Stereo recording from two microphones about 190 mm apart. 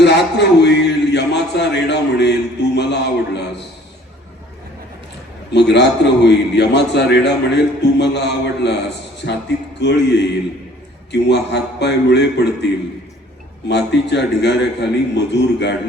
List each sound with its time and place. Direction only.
0.0 s a sound: 65° left (ahead or behind)
5.5 s a man's voice: 65° left (ahead or behind)
9.8 s a man's voice: 65° left (ahead or behind)
13.7 s a man's voice: 65° left (ahead or behind)